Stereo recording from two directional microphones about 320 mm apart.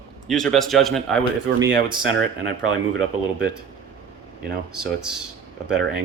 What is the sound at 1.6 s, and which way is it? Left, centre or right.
Speech, right.